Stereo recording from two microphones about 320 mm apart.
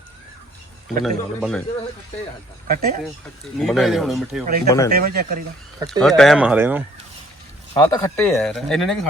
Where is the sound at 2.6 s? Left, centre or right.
Right.